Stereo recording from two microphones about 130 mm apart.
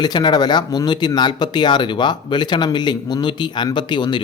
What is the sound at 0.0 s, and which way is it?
Speech, 35° left (ahead or behind).